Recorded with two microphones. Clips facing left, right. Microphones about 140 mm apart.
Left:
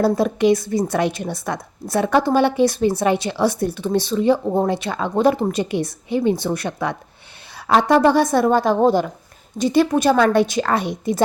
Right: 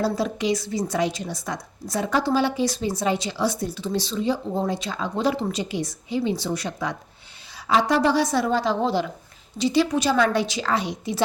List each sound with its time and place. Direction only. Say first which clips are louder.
0.0 s a woman's voice: left 7 dB; 55° left (ahead or behind)